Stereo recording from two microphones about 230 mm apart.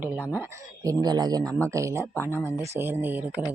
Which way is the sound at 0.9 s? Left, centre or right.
Centre.